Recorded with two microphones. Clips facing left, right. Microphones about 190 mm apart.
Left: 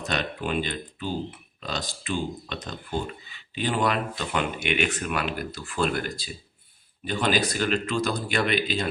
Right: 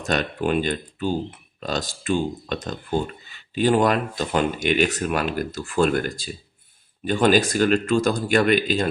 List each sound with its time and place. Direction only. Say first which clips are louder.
0.0 s speech: right 6 dB; 45° right (ahead or behind)